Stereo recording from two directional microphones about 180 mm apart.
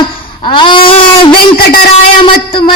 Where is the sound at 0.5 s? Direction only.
25° left (ahead or behind).